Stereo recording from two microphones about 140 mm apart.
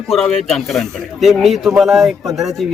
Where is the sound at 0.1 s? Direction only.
Centre (ahead or behind).